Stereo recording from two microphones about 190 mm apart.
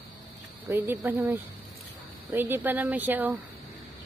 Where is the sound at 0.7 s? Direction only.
15° right (ahead or behind).